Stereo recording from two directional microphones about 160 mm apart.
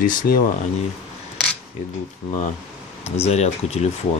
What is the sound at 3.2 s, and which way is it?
Speech, 40° left (ahead or behind).